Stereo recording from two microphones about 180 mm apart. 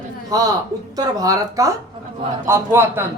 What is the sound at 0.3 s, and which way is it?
Speech, 20° right (ahead or behind).